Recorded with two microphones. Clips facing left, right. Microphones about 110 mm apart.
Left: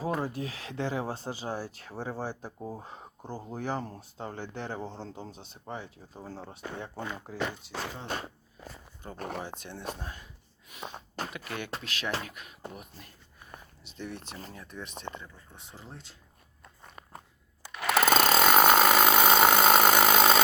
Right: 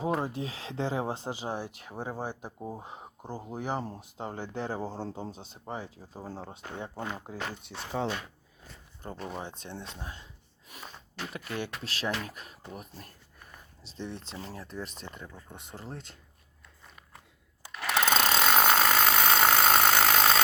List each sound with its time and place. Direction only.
0.0 s speech: 25° right (ahead or behind)
6.4 s speech: 20° right (ahead or behind)
7.7 s speech: 90° left
9.1 s speech: 55° left (ahead or behind)
9.6 s speech: 25° right (ahead or behind)
10.8 s a sound: 45° left (ahead or behind)
11.8 s speech: 35° right (ahead or behind)
13.8 s speech: 30° right (ahead or behind)
15.1 s speech: 45° left (ahead or behind)
15.5 s speech: 60° right (ahead or behind)
16.6 s biting: 40° left (ahead or behind)
17.7 s a sound: 5° left (ahead or behind)